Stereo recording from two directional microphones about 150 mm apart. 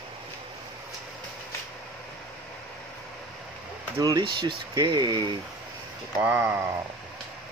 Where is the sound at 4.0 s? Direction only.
25° right (ahead or behind).